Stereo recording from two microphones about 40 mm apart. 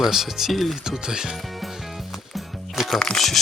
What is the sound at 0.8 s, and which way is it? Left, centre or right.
Speech, centre.